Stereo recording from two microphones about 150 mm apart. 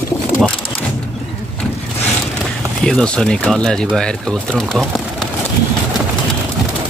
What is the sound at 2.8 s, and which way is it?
Speech, 5° left (ahead or behind).